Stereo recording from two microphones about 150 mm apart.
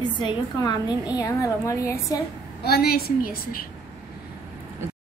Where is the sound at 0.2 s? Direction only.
30° left (ahead or behind).